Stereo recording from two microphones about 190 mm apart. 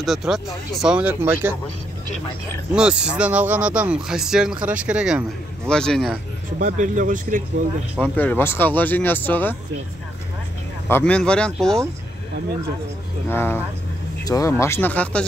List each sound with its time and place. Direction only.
0.0 s speech: centre (ahead or behind)
2.7 s speech: 5° right (ahead or behind)
6.6 s speech: 40° right (ahead or behind)
8.0 s speech: 10° left (ahead or behind)
10.9 s speech: 10° left (ahead or behind)
13.3 s speech: 10° left (ahead or behind)